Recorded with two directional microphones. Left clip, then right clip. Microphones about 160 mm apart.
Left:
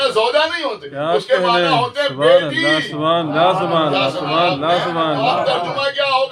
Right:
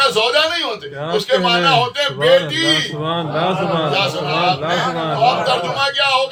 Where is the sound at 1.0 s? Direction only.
55° left (ahead or behind).